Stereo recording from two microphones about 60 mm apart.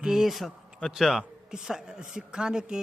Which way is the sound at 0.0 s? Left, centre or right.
Centre.